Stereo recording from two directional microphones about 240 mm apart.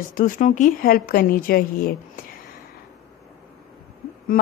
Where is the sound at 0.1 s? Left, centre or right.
Left.